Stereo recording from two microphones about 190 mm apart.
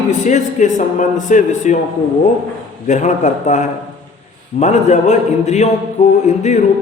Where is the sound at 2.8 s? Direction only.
40° left (ahead or behind).